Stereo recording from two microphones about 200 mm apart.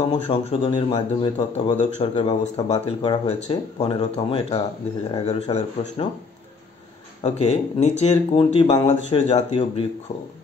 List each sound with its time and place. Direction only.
0.0 s speech: 30° left (ahead or behind)
7.2 s speech: 30° left (ahead or behind)